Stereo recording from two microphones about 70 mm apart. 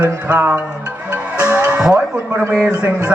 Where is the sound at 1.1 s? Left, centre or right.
Centre.